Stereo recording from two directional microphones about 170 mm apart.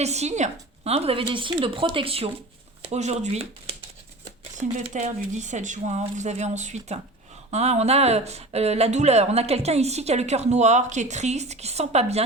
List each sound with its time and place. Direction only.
0.0 s speech: 40° right (ahead or behind)
4.8 s speech: 40° right (ahead or behind)